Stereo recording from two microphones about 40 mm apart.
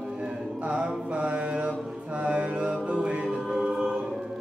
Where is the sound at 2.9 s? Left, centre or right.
Right.